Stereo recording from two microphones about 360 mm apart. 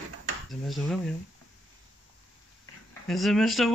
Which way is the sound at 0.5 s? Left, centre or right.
Centre.